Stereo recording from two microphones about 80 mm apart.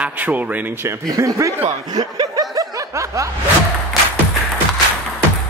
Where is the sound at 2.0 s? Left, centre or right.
Right.